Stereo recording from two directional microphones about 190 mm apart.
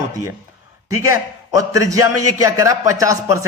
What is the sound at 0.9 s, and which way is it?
A man's voice, 15° right (ahead or behind).